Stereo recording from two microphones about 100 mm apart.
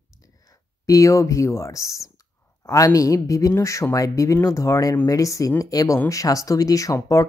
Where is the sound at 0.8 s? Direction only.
35° left (ahead or behind).